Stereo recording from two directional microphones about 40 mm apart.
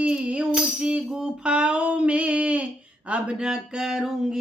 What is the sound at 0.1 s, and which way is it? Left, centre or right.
Music, right.